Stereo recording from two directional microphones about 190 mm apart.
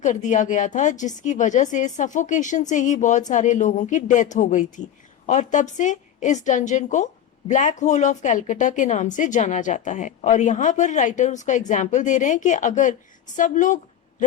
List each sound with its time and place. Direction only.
0.0 s a woman's voice: 40° left (ahead or behind)